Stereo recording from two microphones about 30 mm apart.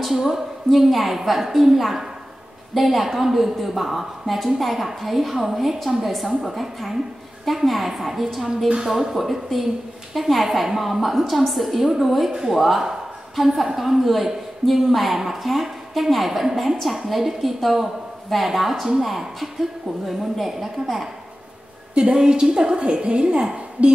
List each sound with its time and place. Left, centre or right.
0.7 s a woman's voice: centre
9.1 s a woman's voice: centre
22.1 s a woman's voice: right